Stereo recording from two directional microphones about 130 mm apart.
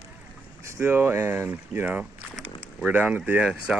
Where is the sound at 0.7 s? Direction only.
15° right (ahead or behind).